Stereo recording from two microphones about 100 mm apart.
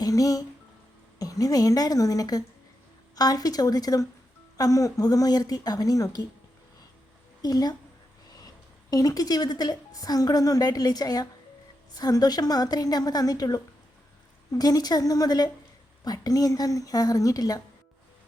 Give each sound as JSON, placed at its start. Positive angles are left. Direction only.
{"t": 0.0, "sound": "music", "side_deg": 35}
{"t": 1.2, "sound": "a woman's voice", "side_deg": 35}
{"t": 7.4, "sound": "a woman's voice", "side_deg": 40}
{"t": 8.9, "sound": "a woman's voice", "side_deg": 35}